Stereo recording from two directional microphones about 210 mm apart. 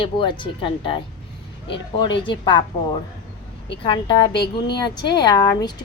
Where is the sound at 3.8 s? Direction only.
20° left (ahead or behind).